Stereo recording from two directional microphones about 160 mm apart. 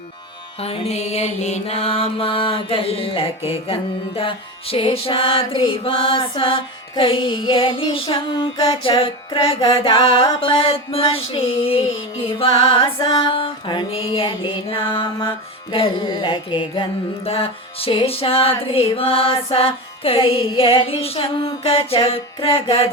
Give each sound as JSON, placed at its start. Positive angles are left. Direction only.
{"t": 0.6, "sound": "mantra", "side_deg": 40}